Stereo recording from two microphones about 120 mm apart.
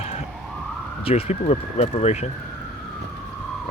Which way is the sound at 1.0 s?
55° left (ahead or behind).